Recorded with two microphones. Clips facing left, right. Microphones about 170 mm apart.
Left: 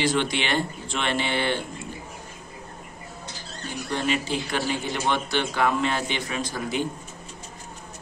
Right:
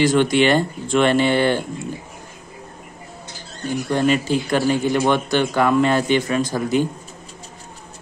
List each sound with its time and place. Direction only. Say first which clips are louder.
0.0 s speech: right 9 dB; 45° right (ahead or behind)
3.9 s speech: right 8 dB; 45° right (ahead or behind)